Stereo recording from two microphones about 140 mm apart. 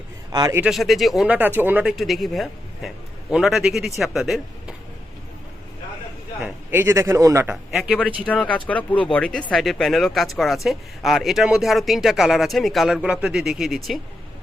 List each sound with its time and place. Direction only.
0.3 s speech: 25° right (ahead or behind)
0.6 s speech: centre (ahead or behind)
1.4 s speech: 15° right (ahead or behind)
6.4 s a man's voice: 15° right (ahead or behind)
7.5 s speech: 5° right (ahead or behind)
8.3 s speech: 10° left (ahead or behind)